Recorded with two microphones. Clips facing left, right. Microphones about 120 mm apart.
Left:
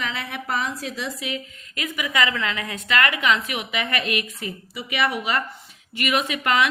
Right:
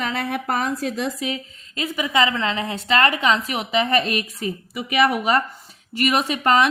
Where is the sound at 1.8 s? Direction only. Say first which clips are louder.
Right 4 dB; 30° right (ahead or behind).